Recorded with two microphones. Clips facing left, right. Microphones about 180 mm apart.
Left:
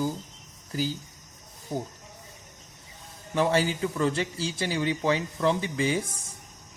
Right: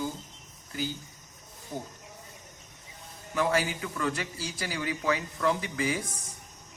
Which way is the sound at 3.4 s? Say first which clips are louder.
Left 3 dB; 30° left (ahead or behind).